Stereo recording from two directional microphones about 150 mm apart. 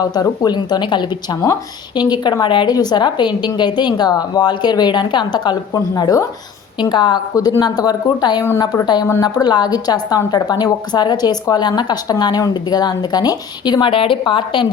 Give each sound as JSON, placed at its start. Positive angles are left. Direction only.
{"t": 0.0, "sound": "a woman's voice", "side_deg": 25}